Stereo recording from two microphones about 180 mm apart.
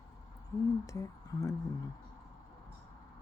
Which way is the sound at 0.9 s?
20° left (ahead or behind).